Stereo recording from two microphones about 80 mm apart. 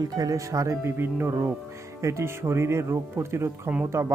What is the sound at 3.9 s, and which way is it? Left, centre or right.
Speech, right.